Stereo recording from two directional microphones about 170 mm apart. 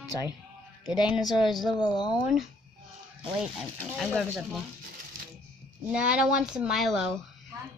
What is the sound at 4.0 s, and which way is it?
Speech, centre (ahead or behind).